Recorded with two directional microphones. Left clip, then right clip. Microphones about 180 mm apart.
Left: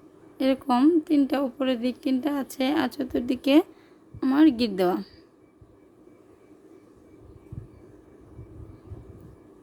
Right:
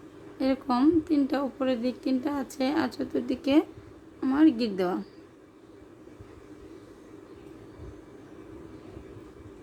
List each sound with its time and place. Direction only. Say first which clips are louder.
0.3 s a woman's voice: left 3 dB; 50° left (ahead or behind)